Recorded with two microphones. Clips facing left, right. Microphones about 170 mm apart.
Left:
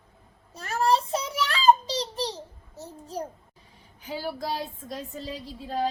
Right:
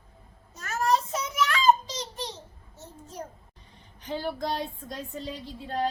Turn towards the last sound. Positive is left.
turn(degrees=0)  # may be behind; listen again after turning